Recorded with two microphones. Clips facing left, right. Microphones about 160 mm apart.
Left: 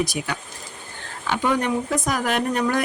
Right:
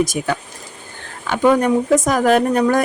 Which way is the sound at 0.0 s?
45° right (ahead or behind).